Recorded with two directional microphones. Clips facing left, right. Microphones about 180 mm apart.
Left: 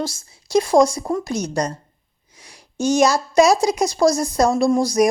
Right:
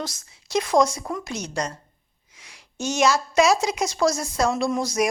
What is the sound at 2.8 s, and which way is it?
Speech, 40° left (ahead or behind).